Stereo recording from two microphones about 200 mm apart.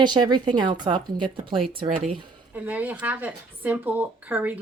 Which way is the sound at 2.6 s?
10° right (ahead or behind).